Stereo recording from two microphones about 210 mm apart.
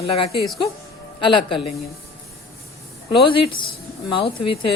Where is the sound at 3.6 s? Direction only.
20° left (ahead or behind).